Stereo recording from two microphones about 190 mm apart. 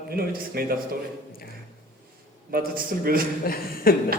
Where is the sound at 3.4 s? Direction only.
50° left (ahead or behind).